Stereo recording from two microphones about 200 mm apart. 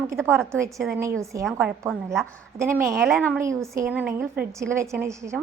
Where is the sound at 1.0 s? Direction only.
15° right (ahead or behind).